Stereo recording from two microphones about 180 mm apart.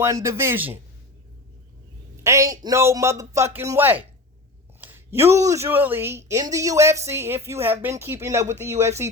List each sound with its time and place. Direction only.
0.0 s a woman's voice: 15° right (ahead or behind)
2.2 s a woman's voice: 15° right (ahead or behind)